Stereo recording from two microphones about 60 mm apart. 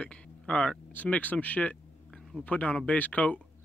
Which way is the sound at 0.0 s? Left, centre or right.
Centre.